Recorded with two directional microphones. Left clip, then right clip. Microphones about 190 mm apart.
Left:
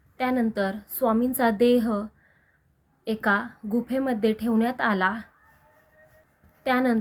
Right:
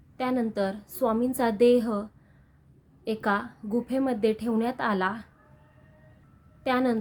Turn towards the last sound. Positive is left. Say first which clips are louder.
# left 2 dB
turn(degrees=-15)  # may be behind; listen again after turning